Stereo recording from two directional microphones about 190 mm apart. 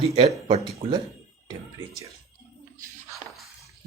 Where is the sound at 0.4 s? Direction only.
35° right (ahead or behind).